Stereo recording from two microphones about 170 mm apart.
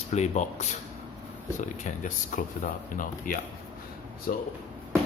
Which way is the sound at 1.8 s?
50° left (ahead or behind).